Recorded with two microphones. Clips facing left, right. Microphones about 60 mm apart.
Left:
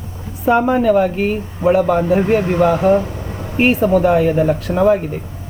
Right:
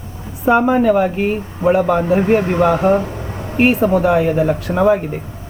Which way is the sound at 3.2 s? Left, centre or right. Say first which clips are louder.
Right 1 dB; right.